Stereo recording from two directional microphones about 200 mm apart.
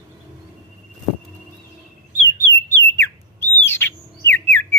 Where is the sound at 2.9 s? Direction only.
10° left (ahead or behind).